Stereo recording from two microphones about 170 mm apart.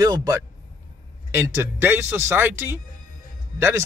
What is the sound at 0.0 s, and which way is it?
A man's voice, 20° right (ahead or behind).